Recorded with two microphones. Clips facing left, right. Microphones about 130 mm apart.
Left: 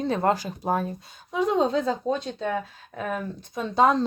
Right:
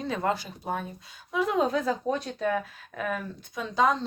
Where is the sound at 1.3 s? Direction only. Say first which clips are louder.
Left 3 dB; 30° left (ahead or behind).